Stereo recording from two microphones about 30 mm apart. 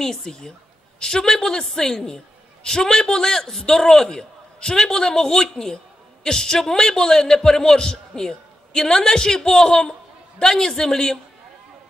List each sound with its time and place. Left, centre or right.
0.0 s a man's voice: centre